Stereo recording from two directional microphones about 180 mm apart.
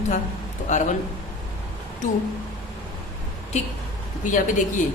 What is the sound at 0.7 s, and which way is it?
Speech, 40° left (ahead or behind).